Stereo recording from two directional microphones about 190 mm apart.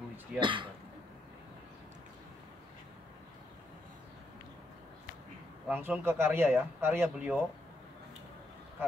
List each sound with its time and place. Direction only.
0.4 s speech: 25° right (ahead or behind)
5.7 s speech: 10° right (ahead or behind)